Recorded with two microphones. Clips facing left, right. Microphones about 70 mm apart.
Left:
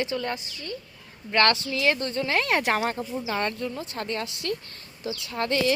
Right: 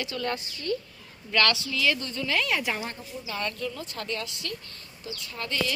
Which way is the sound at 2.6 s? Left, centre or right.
Left.